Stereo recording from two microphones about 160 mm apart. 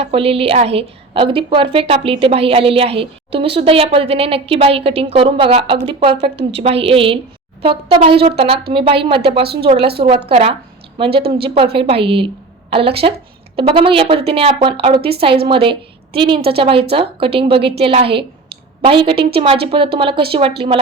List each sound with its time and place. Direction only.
0.0 s a woman's voice: 35° right (ahead or behind)